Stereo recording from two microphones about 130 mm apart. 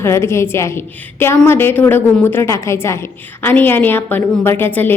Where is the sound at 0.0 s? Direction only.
20° left (ahead or behind).